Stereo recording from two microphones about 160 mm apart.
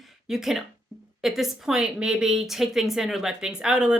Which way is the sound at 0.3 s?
Centre (ahead or behind).